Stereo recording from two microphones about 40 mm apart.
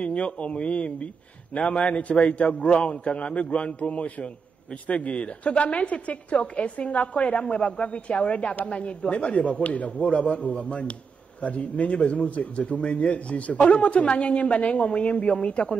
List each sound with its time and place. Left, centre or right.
0.0 s a woman's voice: left